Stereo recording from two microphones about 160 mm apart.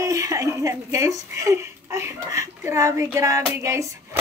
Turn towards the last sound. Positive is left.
turn(degrees=-20)  # may be behind; listen again after turning